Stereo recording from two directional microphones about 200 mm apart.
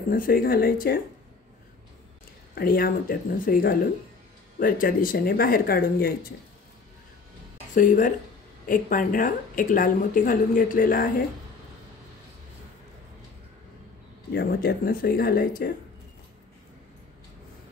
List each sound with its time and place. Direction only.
0.1 s speech: 45° left (ahead or behind)
2.5 s speech: 45° left (ahead or behind)
7.7 s speech: 40° left (ahead or behind)
14.3 s speech: 55° left (ahead or behind)